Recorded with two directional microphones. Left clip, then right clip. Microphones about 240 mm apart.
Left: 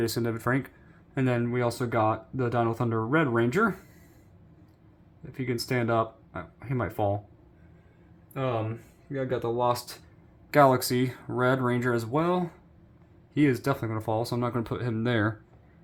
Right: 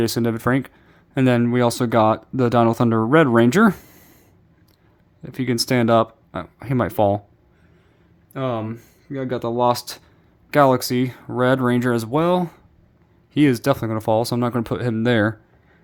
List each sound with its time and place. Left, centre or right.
0.0 s speech: right
5.2 s speech: right
8.3 s speech: right
10.5 s speech: right